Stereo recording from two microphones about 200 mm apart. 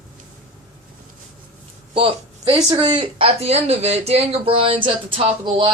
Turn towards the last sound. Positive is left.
turn(degrees=-25)  # may be behind; listen again after turning